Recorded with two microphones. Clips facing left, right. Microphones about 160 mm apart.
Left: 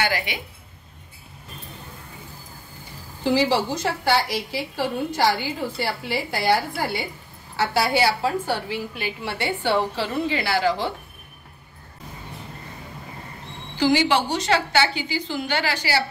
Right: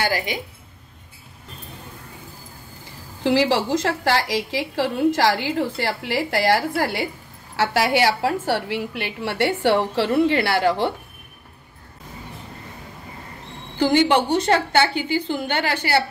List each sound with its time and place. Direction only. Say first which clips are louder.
0.0 s a woman's voice: right 2 dB; 40° right (ahead or behind)
3.3 s a woman's voice: right 2 dB; 90° right; by 10.9 s 60° right (ahead or behind)
13.7 s a woman's voice: right 2 dB; 55° right (ahead or behind)